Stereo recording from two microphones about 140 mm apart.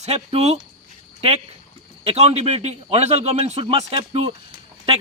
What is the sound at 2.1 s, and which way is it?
A man's voice, 50° right (ahead or behind).